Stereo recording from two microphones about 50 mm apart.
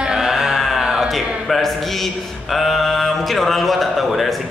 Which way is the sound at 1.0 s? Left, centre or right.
Centre.